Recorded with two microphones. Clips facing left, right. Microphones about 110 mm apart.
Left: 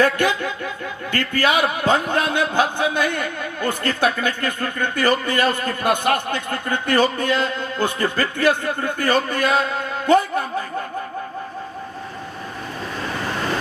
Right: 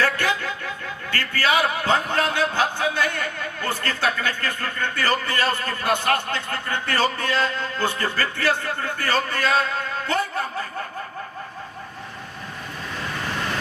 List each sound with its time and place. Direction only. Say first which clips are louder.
0.0 s a man's voice: left 5 dB; 20° left (ahead or behind)